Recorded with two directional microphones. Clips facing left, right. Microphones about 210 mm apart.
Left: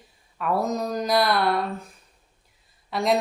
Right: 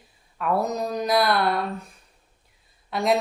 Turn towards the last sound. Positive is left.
turn(degrees=0)  # may be behind; listen again after turning